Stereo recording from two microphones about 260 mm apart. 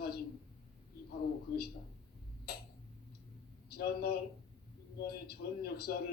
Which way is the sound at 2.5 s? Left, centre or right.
Left.